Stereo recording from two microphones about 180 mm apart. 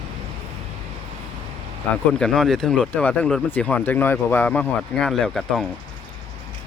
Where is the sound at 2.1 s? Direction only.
Centre (ahead or behind).